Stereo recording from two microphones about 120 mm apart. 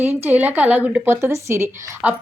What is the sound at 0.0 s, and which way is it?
A woman's voice, 15° right (ahead or behind).